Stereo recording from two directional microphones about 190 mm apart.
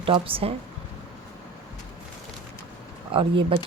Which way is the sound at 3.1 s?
30° right (ahead or behind).